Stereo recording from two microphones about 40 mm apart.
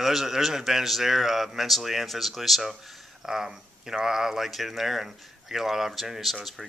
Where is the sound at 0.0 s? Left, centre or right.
Centre.